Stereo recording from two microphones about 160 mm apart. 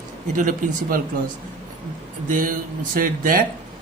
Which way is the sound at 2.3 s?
55° right (ahead or behind).